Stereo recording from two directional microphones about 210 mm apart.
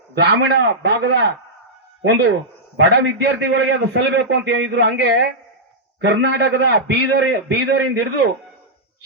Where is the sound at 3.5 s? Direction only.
65° right (ahead or behind).